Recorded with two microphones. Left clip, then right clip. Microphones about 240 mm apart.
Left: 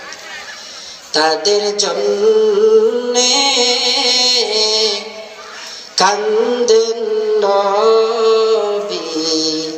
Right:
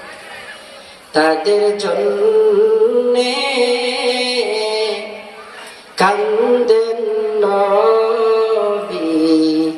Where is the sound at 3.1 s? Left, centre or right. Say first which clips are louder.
Left 2 dB; left.